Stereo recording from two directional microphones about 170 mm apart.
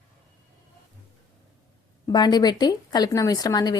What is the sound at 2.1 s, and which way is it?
A woman's voice, 25° left (ahead or behind).